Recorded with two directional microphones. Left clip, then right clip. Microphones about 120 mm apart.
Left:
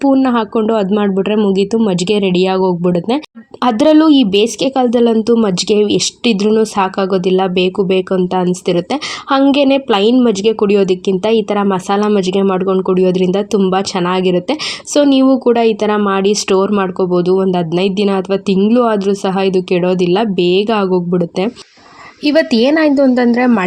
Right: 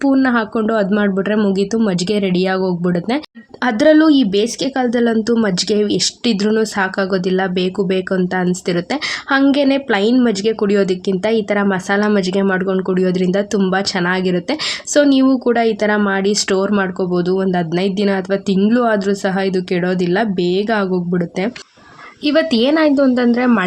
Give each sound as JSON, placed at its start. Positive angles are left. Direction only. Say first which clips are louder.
{"t": 0.0, "sound": "speech", "louder": "left 3 dB", "side_deg": 15}
{"t": 3.6, "sound": "speech", "louder": "left 2 dB", "side_deg": 30}
{"t": 22.2, "sound": "speech", "louder": "left 3 dB", "side_deg": 25}